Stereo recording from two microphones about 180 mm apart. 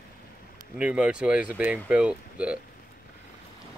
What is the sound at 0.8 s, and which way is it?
Speech, 5° right (ahead or behind).